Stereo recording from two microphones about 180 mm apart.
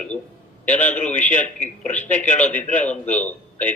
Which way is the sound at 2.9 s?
10° left (ahead or behind).